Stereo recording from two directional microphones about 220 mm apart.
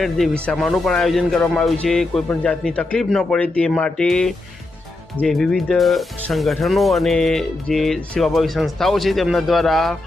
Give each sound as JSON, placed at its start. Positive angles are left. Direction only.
{"t": 0.4, "sound": "speech", "side_deg": 0}